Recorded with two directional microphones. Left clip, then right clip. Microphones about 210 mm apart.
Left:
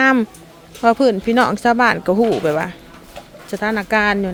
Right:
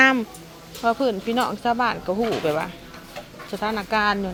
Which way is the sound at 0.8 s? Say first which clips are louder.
Left 8 dB; 50° left (ahead or behind).